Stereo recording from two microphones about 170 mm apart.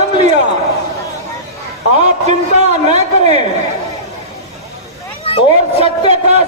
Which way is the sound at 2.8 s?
40° right (ahead or behind).